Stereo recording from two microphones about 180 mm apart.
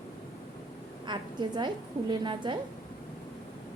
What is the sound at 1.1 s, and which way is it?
A woman's voice, 25° right (ahead or behind).